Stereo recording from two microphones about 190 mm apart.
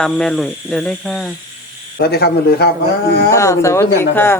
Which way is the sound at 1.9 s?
55° left (ahead or behind).